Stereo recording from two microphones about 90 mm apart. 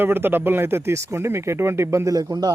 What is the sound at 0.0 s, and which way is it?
Speech, 25° right (ahead or behind).